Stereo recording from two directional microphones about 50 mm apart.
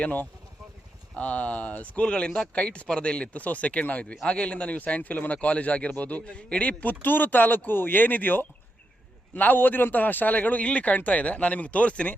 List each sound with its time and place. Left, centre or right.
0.0 s a man's voice: left